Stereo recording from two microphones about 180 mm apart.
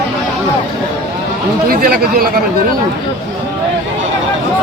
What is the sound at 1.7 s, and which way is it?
Speech, 55° right (ahead or behind).